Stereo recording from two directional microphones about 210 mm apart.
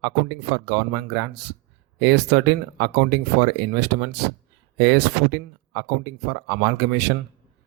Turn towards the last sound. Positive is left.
turn(degrees=-55)  # may be behind; listen again after turning